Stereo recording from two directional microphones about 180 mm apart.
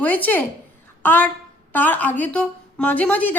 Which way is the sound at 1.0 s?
10° left (ahead or behind).